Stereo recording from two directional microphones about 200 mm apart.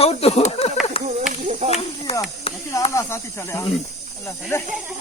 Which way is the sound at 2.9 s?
15° left (ahead or behind).